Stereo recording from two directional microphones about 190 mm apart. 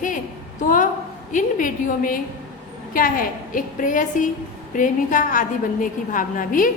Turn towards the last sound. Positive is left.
turn(degrees=45)  # may be behind; listen again after turning